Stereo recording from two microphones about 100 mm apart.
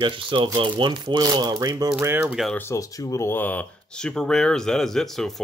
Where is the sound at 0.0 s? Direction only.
55° right (ahead or behind).